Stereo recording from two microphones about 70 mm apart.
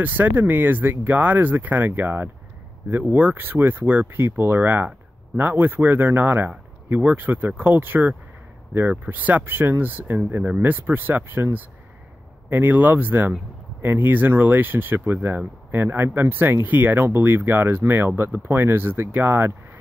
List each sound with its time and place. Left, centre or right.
0.0 s speech: right